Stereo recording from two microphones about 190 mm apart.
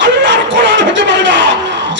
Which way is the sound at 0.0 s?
70° right (ahead or behind).